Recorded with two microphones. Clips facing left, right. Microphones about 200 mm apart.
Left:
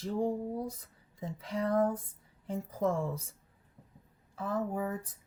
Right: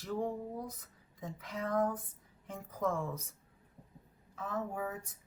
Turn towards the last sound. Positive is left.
turn(degrees=35)  # may be behind; listen again after turning